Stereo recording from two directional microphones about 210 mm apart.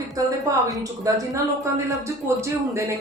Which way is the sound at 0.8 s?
15° right (ahead or behind).